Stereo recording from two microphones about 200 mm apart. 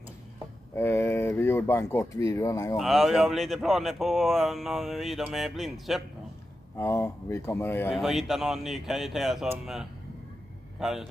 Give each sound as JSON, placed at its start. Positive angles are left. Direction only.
{"t": 0.7, "sound": "speech", "side_deg": 15}
{"t": 2.8, "sound": "speech", "side_deg": 0}
{"t": 6.8, "sound": "speech", "side_deg": 15}
{"t": 7.9, "sound": "speech", "side_deg": 0}